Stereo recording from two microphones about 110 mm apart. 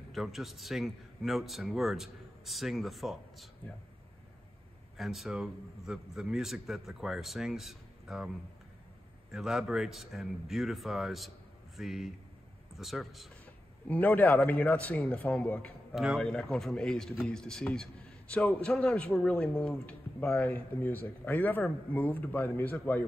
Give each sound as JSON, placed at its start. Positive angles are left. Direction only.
{"t": 0.1, "sound": "a man's voice", "side_deg": 0}
{"t": 4.9, "sound": "a man's voice", "side_deg": 0}
{"t": 9.3, "sound": "a man's voice", "side_deg": -5}
{"t": 13.8, "sound": "speech", "side_deg": 15}
{"t": 15.9, "sound": "speech", "side_deg": -5}
{"t": 16.2, "sound": "a man's voice", "side_deg": 5}